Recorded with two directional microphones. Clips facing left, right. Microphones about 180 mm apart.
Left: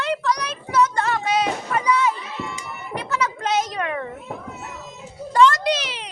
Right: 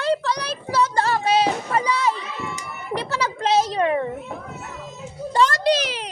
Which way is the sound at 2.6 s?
35° right (ahead or behind).